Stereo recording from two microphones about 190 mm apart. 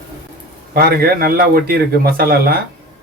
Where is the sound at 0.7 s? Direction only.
55° right (ahead or behind).